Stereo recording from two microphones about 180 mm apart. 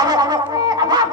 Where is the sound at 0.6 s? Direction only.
20° right (ahead or behind).